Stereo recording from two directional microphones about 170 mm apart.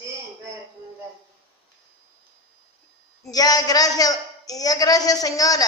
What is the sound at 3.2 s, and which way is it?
A woman's voice, 20° left (ahead or behind).